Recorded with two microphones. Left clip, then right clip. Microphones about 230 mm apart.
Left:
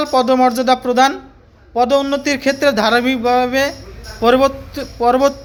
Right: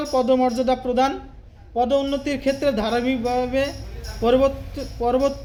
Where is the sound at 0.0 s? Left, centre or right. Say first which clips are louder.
Left 6 dB; left.